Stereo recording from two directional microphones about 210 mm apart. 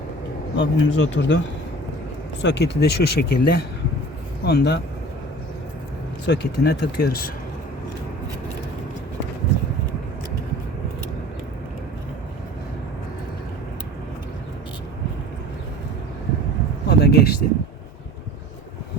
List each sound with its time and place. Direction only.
0.5 s speech: 60° left (ahead or behind)
2.4 s speech: 55° left (ahead or behind)
6.2 s speech: 55° left (ahead or behind)
16.8 s a sound: 50° left (ahead or behind)